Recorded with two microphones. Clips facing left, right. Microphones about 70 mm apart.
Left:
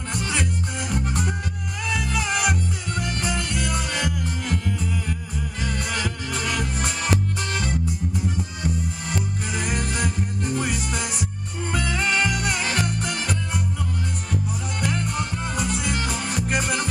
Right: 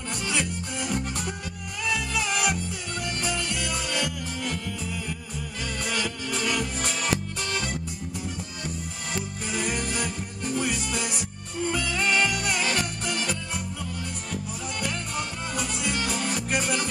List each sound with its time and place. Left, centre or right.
0.1 s music: left
9.0 s music: left